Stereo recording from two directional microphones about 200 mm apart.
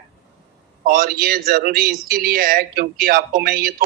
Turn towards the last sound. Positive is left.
turn(degrees=-45)  # may be behind; listen again after turning